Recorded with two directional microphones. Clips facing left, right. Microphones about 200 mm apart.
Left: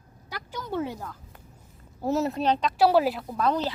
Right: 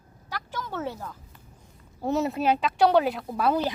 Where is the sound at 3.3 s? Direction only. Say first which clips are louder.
Right 1 dB; 10° right (ahead or behind).